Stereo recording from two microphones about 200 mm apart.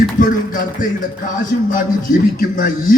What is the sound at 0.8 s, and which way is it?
A man's voice, 40° left (ahead or behind).